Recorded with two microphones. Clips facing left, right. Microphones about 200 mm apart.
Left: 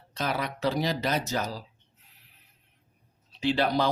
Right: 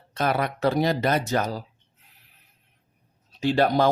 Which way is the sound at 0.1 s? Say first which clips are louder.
Right 6 dB; 55° right (ahead or behind).